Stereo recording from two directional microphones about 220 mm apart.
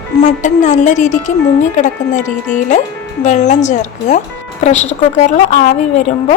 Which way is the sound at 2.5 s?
35° left (ahead or behind).